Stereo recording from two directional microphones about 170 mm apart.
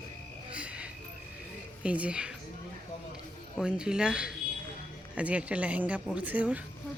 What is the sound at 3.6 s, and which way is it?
A woman's voice, 5° right (ahead or behind).